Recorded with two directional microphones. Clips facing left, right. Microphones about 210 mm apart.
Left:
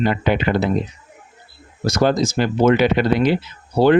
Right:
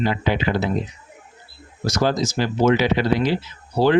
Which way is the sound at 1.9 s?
55° left (ahead or behind).